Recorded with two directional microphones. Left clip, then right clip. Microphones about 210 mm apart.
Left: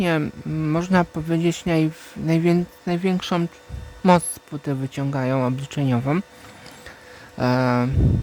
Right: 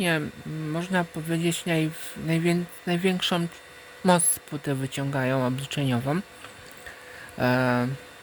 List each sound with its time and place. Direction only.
0.0 s speech: 15° left (ahead or behind)
7.3 s speech: 15° left (ahead or behind)